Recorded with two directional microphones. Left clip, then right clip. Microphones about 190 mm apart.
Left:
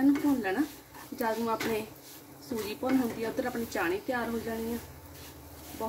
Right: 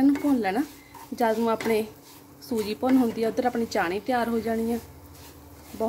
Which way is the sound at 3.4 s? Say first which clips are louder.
Right 4 dB; 55° right (ahead or behind).